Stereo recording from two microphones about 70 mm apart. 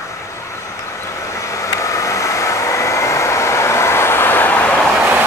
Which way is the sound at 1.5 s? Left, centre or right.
Left.